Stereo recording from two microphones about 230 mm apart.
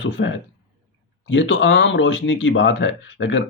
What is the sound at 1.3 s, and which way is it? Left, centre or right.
Speech, left.